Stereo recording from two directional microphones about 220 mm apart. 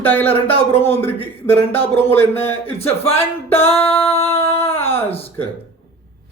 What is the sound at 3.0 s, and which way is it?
Music, 25° left (ahead or behind).